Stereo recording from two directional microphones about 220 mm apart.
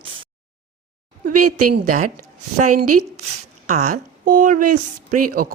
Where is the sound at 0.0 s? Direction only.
25° right (ahead or behind).